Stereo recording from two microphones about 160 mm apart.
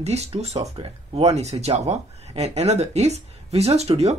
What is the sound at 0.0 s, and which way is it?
Speech, 40° right (ahead or behind).